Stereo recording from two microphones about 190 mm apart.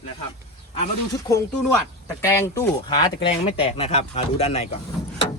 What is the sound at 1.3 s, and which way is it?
Speech, 15° left (ahead or behind).